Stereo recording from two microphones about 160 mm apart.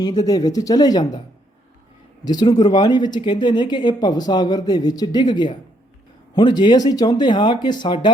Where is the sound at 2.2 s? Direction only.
25° left (ahead or behind).